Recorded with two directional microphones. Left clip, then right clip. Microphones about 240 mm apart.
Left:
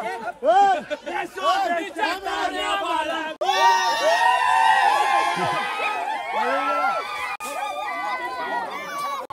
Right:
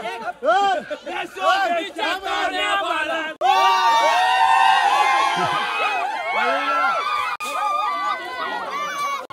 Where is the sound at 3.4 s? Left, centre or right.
Centre.